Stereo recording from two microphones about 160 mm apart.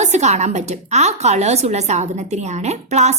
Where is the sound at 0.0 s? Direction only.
45° right (ahead or behind).